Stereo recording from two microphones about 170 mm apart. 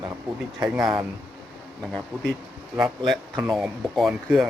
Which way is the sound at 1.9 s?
5° left (ahead or behind).